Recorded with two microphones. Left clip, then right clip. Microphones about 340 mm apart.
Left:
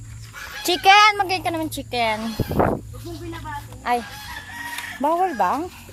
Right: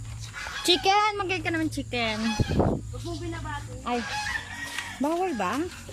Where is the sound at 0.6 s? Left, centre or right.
Centre.